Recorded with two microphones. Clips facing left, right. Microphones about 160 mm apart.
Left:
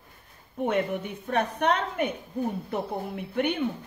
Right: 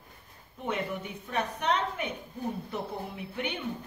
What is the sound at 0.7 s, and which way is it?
Speech, 55° left (ahead or behind).